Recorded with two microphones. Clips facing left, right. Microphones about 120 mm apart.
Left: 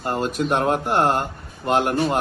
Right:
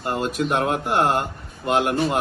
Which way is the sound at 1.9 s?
Centre (ahead or behind).